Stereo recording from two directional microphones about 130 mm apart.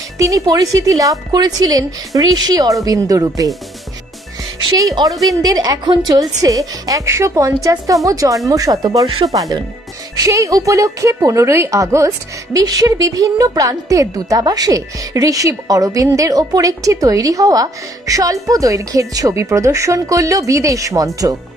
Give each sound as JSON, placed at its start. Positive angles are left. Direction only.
{"t": 0.2, "sound": "a woman's voice", "side_deg": -25}
{"t": 4.6, "sound": "a woman's voice", "side_deg": -30}
{"t": 10.1, "sound": "a woman's voice", "side_deg": -25}